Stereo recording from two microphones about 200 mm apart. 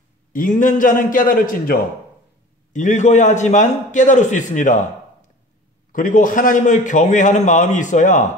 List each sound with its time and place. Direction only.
0.3 s a man's voice: 45° left (ahead or behind)
5.9 s a man's voice: 40° left (ahead or behind)